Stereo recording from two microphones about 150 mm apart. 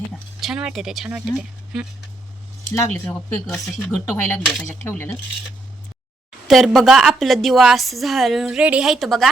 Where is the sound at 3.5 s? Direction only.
5° left (ahead or behind).